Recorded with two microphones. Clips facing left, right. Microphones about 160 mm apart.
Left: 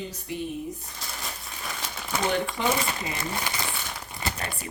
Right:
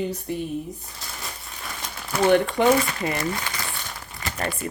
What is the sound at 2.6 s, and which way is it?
Speech, 60° right (ahead or behind).